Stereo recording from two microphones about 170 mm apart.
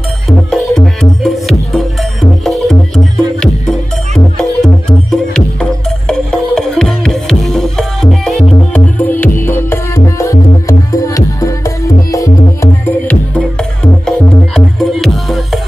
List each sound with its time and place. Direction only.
0.3 s music: centre (ahead or behind)
5.1 s music: 5° left (ahead or behind); by 11.7 s 20° left (ahead or behind)
12.8 s music: 10° left (ahead or behind)